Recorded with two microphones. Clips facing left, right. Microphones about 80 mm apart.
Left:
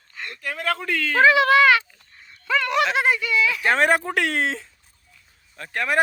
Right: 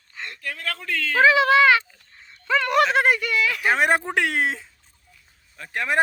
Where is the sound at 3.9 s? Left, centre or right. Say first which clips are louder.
Even; centre.